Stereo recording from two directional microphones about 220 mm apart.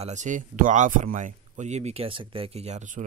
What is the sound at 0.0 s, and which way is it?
Speech, 35° right (ahead or behind).